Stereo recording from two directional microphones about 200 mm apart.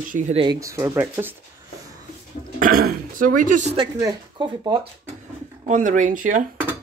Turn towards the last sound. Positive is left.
turn(degrees=-40)  # may be behind; listen again after turning